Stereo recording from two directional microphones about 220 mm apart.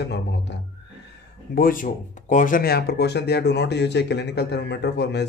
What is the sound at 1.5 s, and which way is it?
Speech, 40° left (ahead or behind).